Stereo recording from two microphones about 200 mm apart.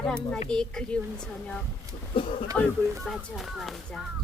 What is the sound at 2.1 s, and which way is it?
Speech, 25° left (ahead or behind).